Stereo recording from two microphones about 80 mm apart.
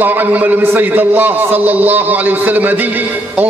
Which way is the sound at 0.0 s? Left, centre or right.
Right.